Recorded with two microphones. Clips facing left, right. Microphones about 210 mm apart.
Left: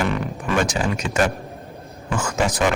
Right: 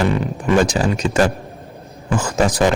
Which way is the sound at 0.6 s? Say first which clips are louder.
Right 5 dB; 35° right (ahead or behind).